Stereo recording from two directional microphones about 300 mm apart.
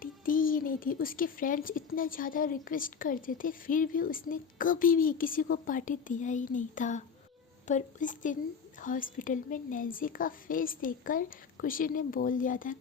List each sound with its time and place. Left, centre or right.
0.0 s speech: left